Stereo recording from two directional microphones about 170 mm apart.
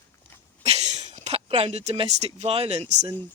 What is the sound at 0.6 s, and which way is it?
Speech, 40° right (ahead or behind).